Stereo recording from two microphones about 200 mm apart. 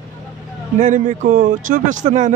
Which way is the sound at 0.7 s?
40° right (ahead or behind).